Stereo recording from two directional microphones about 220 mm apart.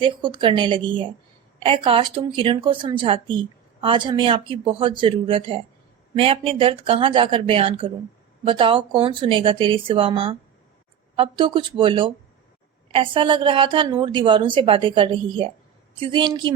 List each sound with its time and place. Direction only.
0.0 s a woman's voice: 20° right (ahead or behind)